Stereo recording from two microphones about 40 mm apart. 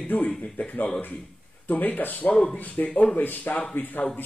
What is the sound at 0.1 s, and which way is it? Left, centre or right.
Speech, left.